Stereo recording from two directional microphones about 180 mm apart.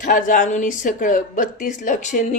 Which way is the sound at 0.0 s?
45° left (ahead or behind).